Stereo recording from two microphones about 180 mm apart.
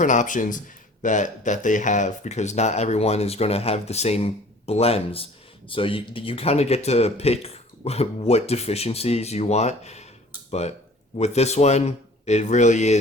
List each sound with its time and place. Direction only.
0.0 s speech: 45° left (ahead or behind)